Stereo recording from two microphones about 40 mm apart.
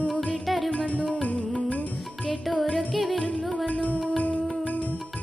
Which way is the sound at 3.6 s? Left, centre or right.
Left.